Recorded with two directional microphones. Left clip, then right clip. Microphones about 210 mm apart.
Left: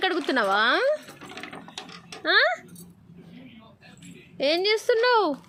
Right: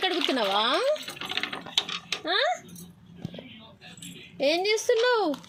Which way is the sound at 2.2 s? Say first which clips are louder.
Left 6 dB; 20° left (ahead or behind).